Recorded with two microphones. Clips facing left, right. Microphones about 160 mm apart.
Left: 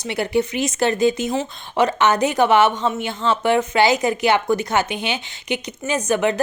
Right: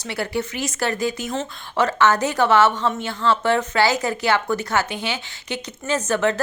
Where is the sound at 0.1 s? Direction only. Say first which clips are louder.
Left 5 dB; 20° left (ahead or behind).